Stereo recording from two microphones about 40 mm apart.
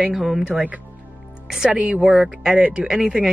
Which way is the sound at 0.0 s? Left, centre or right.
Centre.